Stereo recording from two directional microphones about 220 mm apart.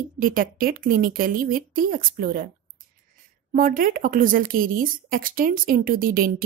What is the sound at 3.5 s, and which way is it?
A woman's voice, 40° right (ahead or behind).